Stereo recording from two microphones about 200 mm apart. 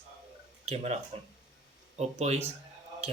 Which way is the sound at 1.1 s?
30° right (ahead or behind).